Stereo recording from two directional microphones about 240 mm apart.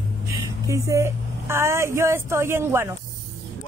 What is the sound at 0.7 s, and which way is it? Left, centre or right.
A woman's voice, centre.